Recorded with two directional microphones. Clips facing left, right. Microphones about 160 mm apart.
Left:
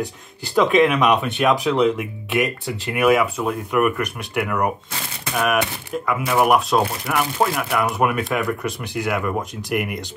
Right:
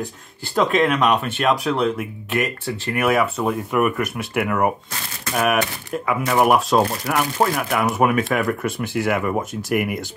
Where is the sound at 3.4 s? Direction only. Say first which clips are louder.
Even; centre (ahead or behind).